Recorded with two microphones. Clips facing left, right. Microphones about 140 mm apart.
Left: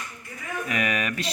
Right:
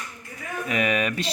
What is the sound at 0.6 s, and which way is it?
Speech, 20° right (ahead or behind).